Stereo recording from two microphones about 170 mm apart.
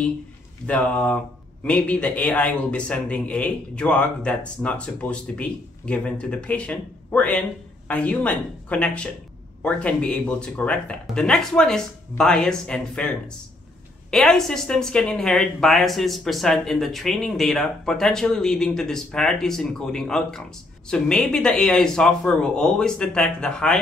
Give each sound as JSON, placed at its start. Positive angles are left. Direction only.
{"t": 0.7, "sound": "speech", "side_deg": 5}
{"t": 14.1, "sound": "speech", "side_deg": 5}